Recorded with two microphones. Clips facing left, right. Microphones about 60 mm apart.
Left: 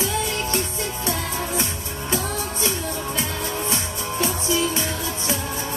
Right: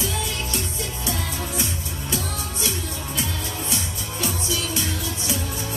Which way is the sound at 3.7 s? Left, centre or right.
Left.